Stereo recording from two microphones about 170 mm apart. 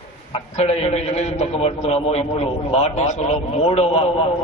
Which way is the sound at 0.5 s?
40° left (ahead or behind).